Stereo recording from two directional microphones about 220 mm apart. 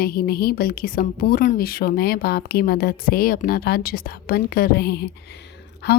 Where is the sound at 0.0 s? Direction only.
45° left (ahead or behind).